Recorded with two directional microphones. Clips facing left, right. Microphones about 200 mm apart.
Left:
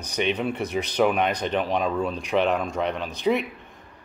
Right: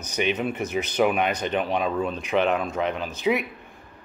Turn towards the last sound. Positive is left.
turn(degrees=-5)  # may be behind; listen again after turning